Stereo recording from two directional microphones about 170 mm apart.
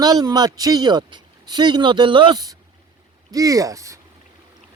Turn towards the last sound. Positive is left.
turn(degrees=-20)  # may be behind; listen again after turning